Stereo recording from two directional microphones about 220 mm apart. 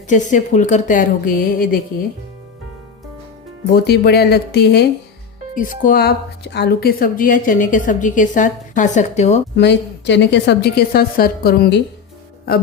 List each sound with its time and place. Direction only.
0.1 s speech: 35° left (ahead or behind)
3.8 s a woman's voice: 45° left (ahead or behind)
5.5 s speech: 40° left (ahead or behind)
9.6 s a woman's voice: 50° left (ahead or behind)